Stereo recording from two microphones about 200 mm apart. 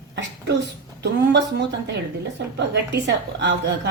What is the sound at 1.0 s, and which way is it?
A woman's voice, 60° right (ahead or behind).